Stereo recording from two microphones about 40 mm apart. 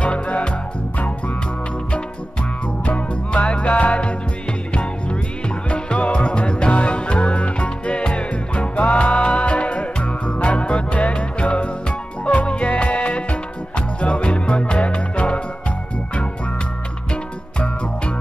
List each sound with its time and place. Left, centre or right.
0.0 s music: left
2.8 s music: left
5.7 s music: left
17.1 s music: left